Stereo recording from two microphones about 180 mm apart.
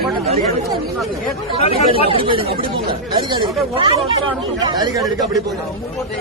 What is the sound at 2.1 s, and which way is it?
Speech, 30° right (ahead or behind).